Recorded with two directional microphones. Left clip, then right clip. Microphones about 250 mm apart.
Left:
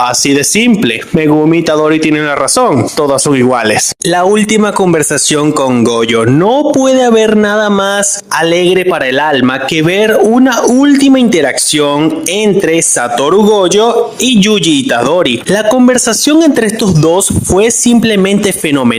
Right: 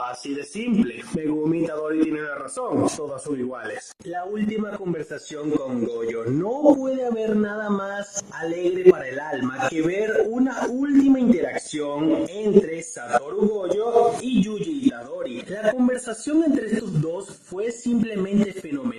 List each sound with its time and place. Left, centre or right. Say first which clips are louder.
1.8 s speech: left 14 dB; left
4.1 s speech: left 19 dB; left
6.1 s speech: left 17 dB; left
10.0 s speech: left 15 dB; left
15.2 s speech: left 16 dB; left